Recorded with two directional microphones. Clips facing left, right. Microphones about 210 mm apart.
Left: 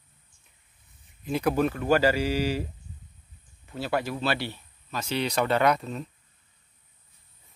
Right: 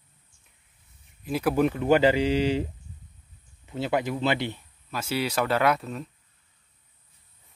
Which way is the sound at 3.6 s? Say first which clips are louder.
Right 2 dB; 20° right (ahead or behind).